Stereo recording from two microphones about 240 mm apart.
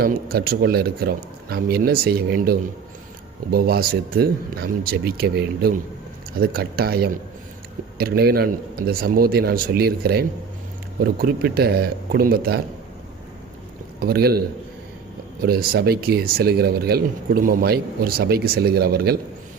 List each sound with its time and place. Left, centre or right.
0.0 s speech: right
14.0 s speech: right